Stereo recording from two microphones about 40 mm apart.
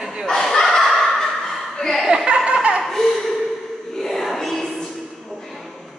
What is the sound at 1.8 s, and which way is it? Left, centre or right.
Chuckle, centre.